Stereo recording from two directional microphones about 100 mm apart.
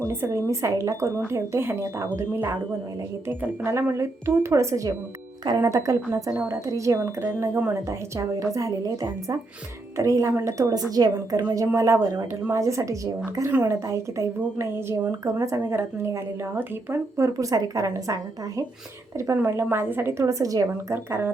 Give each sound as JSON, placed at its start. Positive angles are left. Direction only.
{"t": 0.1, "sound": "speech", "side_deg": -25}